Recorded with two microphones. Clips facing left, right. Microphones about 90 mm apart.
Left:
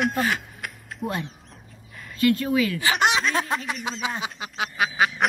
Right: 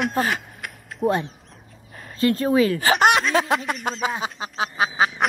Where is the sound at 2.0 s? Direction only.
35° right (ahead or behind).